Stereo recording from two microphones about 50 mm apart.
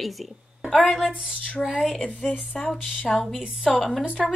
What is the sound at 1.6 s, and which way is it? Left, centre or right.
Speech, centre.